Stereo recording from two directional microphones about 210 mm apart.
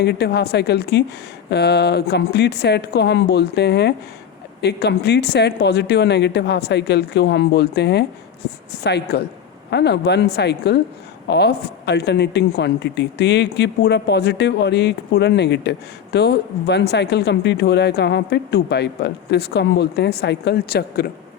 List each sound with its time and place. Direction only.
0.0 s speech: 50° left (ahead or behind)